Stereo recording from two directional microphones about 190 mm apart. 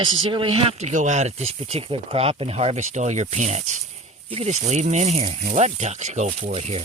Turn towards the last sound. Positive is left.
turn(degrees=-35)  # may be behind; listen again after turning